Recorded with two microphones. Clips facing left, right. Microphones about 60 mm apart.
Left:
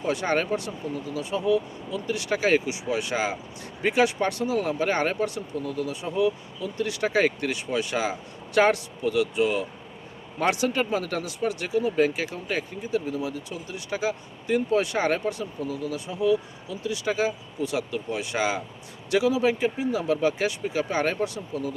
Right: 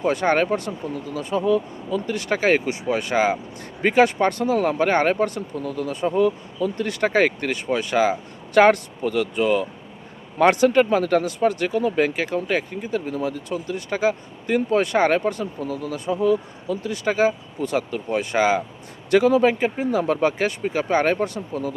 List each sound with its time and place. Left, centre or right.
0.0 s speech: right